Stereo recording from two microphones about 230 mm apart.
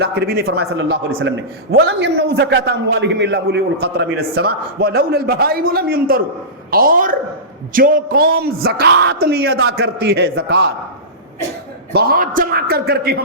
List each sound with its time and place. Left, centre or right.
0.0 s a man's voice: right
11.9 s speech: right